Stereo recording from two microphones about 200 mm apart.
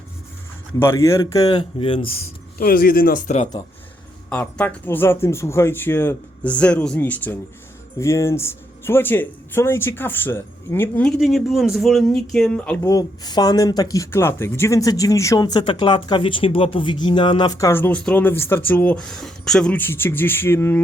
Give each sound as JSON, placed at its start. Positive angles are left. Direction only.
{"t": 0.8, "sound": "speech", "side_deg": 15}
{"t": 2.6, "sound": "speech", "side_deg": 45}
{"t": 4.3, "sound": "speech", "side_deg": 5}